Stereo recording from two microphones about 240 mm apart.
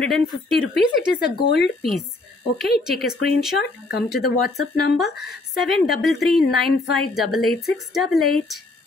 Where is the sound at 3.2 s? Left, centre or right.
Left.